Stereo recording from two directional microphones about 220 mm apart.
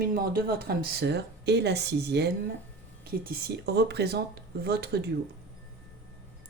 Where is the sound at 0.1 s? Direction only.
45° right (ahead or behind).